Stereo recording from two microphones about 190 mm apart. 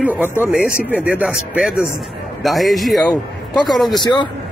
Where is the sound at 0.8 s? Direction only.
10° right (ahead or behind).